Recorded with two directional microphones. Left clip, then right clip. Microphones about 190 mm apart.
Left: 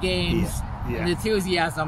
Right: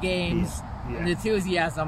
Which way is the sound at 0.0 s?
Centre (ahead or behind).